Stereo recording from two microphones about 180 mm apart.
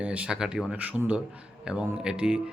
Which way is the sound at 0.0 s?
5° right (ahead or behind).